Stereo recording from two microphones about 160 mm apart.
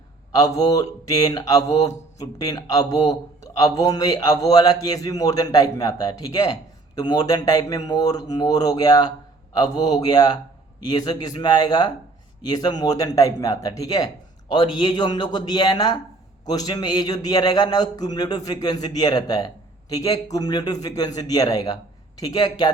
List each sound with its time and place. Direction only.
0.3 s a man's voice: 20° left (ahead or behind)